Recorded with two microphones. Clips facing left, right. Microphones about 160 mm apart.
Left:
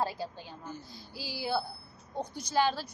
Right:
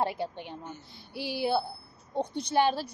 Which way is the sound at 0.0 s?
25° right (ahead or behind).